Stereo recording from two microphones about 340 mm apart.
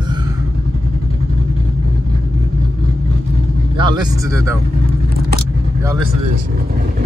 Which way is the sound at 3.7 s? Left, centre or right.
Centre.